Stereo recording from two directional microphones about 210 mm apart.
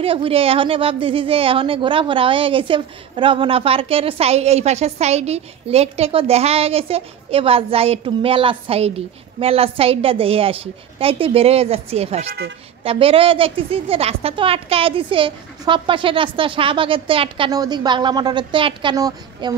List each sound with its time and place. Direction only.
0.0 s a woman's voice: 25° right (ahead or behind)